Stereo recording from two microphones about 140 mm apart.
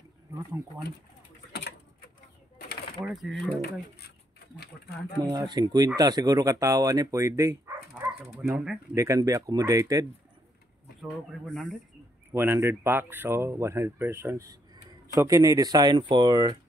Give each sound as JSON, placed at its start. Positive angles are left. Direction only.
{"t": 3.0, "sound": "speech", "side_deg": 0}
{"t": 5.3, "sound": "speech", "side_deg": -30}
{"t": 7.9, "sound": "dog", "side_deg": -5}
{"t": 8.9, "sound": "speech", "side_deg": -20}
{"t": 11.0, "sound": "speech", "side_deg": 0}
{"t": 12.3, "sound": "speech", "side_deg": -15}